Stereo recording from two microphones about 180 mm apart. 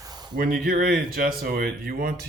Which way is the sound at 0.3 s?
55° right (ahead or behind).